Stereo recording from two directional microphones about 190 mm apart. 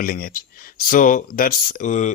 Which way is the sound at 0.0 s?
50° left (ahead or behind).